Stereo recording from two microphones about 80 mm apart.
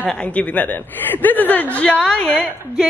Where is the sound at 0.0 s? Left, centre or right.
Centre.